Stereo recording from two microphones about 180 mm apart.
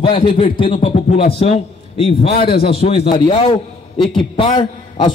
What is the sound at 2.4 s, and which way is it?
Speech, 55° left (ahead or behind).